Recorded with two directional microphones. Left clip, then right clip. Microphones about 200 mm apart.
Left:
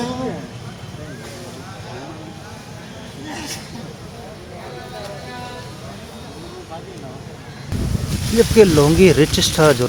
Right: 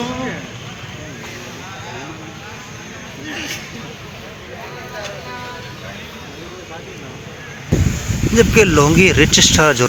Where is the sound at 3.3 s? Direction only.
65° left (ahead or behind).